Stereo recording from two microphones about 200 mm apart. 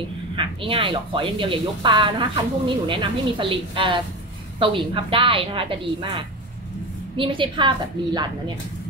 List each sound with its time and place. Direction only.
0.4 s speech: 25° right (ahead or behind)